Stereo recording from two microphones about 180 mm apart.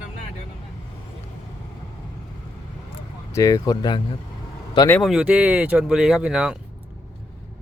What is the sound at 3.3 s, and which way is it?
Speech, 20° left (ahead or behind).